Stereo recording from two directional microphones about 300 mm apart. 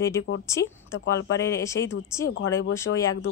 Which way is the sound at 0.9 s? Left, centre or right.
Left.